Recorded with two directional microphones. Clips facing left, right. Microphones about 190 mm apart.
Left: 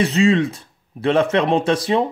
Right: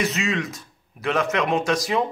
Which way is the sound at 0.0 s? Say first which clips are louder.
Left 9 dB; 30° left (ahead or behind).